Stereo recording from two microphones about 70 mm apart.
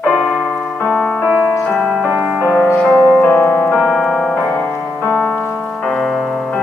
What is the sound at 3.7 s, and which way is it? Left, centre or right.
Music, centre.